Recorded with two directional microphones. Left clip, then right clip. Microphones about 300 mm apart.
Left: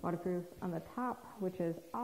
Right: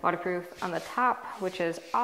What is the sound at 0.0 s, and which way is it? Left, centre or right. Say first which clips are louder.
Speech: right 10 dB; centre.